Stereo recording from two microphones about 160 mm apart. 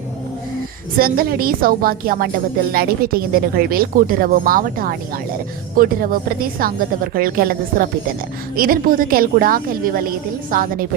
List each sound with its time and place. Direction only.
0.9 s a woman's voice: 70° right (ahead or behind)